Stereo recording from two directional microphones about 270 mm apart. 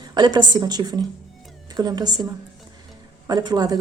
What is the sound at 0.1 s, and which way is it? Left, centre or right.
A woman's voice, centre.